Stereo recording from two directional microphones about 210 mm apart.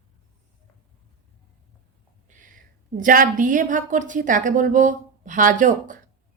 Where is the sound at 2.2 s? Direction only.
35° right (ahead or behind).